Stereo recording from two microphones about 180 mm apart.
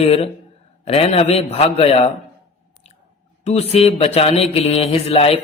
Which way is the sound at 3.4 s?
35° left (ahead or behind).